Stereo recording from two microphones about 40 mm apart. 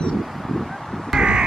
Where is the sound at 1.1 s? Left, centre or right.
Centre.